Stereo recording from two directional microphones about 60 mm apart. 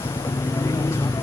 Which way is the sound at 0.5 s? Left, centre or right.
Left.